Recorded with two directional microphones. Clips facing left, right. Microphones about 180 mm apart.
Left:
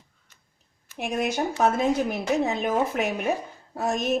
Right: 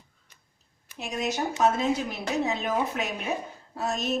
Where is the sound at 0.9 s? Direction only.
55° left (ahead or behind).